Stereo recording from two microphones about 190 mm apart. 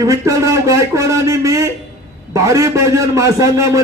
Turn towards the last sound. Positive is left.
turn(degrees=-15)  # may be behind; listen again after turning